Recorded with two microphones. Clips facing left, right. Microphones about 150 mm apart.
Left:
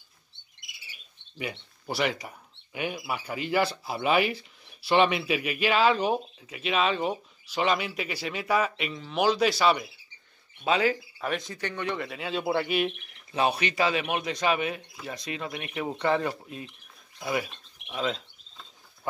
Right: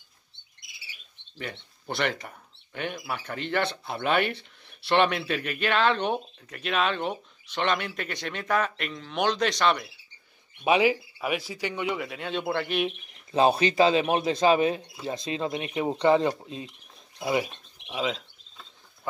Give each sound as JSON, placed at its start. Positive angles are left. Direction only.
{"t": 1.4, "sound": "speech", "side_deg": 5}
{"t": 10.6, "sound": "speech", "side_deg": -10}
{"t": 12.0, "sound": "speech", "side_deg": 0}
{"t": 13.3, "sound": "speech", "side_deg": -30}
{"t": 17.2, "sound": "a sound", "side_deg": -20}